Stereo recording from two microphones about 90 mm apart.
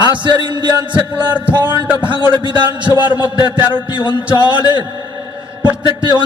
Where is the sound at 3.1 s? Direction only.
50° left (ahead or behind).